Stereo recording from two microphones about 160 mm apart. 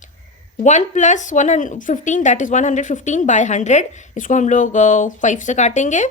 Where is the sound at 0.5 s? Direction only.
50° left (ahead or behind).